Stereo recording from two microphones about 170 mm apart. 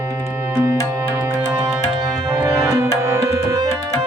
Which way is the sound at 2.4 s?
20° right (ahead or behind).